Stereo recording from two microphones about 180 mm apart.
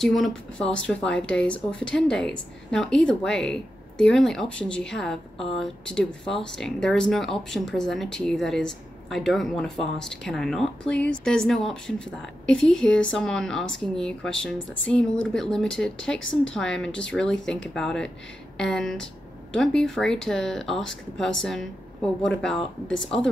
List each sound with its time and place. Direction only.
0.0 s speech: centre (ahead or behind)
16.2 s a woman's voice: 90° left
16.5 s speech: 5° left (ahead or behind)